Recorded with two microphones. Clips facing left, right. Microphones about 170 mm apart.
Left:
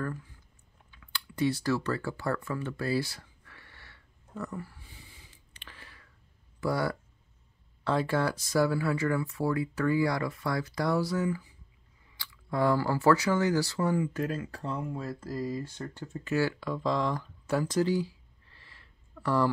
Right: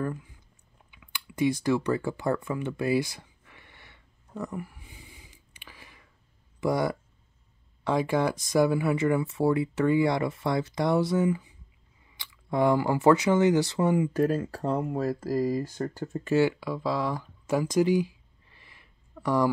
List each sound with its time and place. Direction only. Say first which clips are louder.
0.0 s speech: right 4 dB; 15° right (ahead or behind)
0.9 s computer keyboard: right 3 dB; 15° right (ahead or behind)
6.6 s speech: right 4 dB; 20° right (ahead or behind)
14.1 s speech: right 7 dB; 35° right (ahead or behind)
16.3 s speech: right 5 dB; 15° right (ahead or behind)